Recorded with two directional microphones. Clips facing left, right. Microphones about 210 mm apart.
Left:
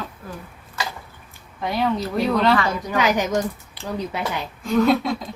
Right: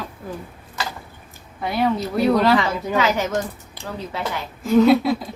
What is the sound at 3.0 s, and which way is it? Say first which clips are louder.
Speech: left 1 dB; 15° left (ahead or behind).